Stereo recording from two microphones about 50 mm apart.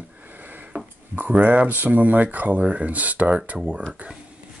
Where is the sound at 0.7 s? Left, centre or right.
Right.